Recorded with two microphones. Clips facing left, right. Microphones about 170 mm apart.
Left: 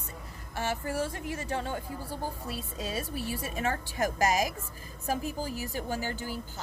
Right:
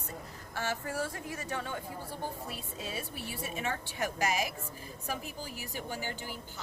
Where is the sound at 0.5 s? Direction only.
25° left (ahead or behind).